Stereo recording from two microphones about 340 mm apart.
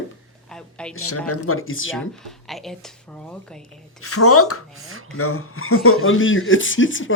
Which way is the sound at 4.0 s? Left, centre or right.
Left.